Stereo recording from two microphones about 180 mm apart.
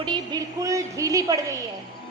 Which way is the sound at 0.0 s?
25° right (ahead or behind).